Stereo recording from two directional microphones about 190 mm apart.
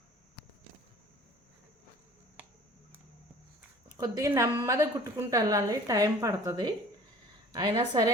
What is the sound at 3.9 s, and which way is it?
A woman's voice, 15° right (ahead or behind).